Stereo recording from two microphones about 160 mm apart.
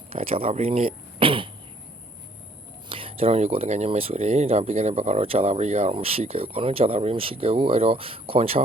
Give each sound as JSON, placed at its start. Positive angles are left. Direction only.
{"t": 0.1, "sound": "speech", "side_deg": -35}
{"t": 2.9, "sound": "speech", "side_deg": -35}